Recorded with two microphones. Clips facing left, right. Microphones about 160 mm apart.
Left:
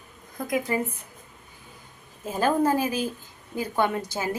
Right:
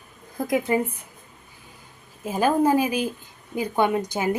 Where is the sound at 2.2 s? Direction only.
10° right (ahead or behind).